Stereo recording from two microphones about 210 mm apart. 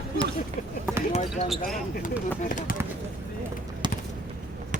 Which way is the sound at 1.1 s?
30° left (ahead or behind).